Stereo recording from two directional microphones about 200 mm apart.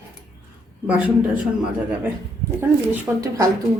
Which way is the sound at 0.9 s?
5° right (ahead or behind).